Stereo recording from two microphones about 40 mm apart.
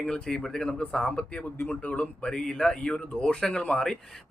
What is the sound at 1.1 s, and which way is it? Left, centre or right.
Speech, left.